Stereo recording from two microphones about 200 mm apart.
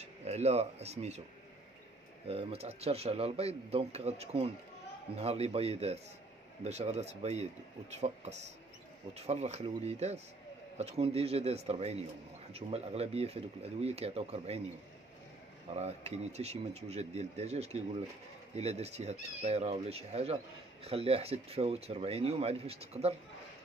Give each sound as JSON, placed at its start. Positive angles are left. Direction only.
{"t": 0.0, "sound": "speech", "side_deg": -30}
{"t": 2.2, "sound": "speech", "side_deg": -30}
{"t": 15.7, "sound": "speech", "side_deg": -30}